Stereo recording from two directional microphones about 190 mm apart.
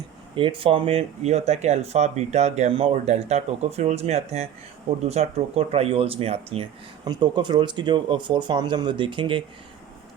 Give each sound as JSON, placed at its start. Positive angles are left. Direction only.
{"t": 0.3, "sound": "speech", "side_deg": -30}